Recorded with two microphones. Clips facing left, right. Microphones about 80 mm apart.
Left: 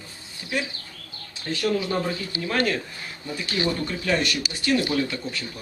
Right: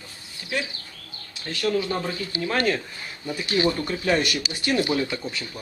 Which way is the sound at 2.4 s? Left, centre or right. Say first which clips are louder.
Right 1 dB; centre.